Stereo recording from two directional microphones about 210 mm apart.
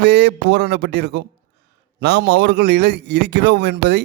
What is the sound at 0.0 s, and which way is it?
A man's voice, 50° right (ahead or behind).